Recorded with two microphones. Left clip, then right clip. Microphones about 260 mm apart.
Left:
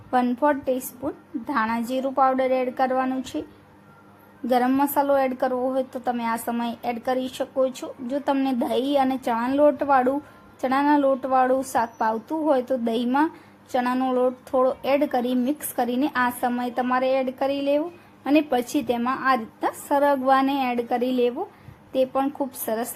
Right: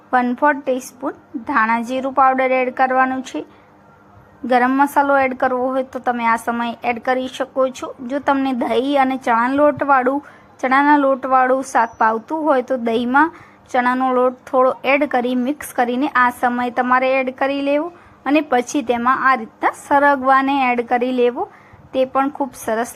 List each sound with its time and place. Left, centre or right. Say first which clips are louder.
0.1 s a woman's voice: right 6 dB; centre
4.4 s a woman's voice: right 6 dB; centre